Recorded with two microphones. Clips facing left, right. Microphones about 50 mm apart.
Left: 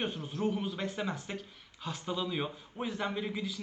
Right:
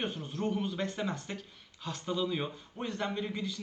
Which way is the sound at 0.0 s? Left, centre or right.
Centre.